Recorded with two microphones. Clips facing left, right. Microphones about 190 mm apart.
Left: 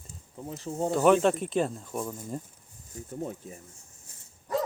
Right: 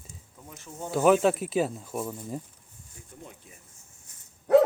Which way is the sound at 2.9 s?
40° left (ahead or behind).